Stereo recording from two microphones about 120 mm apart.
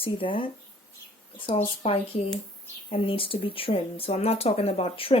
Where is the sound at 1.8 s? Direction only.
60° left (ahead or behind).